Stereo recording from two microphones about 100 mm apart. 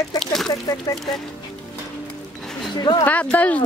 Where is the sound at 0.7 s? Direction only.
35° left (ahead or behind).